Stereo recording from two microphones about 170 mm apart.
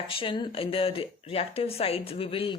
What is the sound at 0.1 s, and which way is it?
Speech, 30° left (ahead or behind).